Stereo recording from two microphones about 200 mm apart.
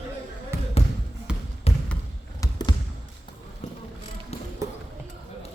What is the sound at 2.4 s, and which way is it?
Basketball bounce, 20° left (ahead or behind).